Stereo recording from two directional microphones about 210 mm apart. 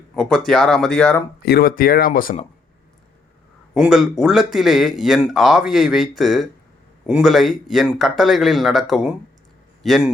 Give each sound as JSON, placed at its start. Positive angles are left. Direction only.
{"t": 0.2, "sound": "speech", "side_deg": 0}
{"t": 1.5, "sound": "speech", "side_deg": 45}
{"t": 3.8, "sound": "speech", "side_deg": 0}